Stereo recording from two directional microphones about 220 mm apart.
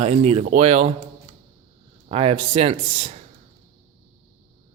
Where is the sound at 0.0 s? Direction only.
30° right (ahead or behind).